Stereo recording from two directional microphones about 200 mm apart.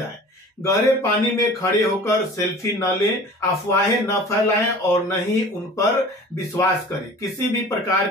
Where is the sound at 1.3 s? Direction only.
15° left (ahead or behind).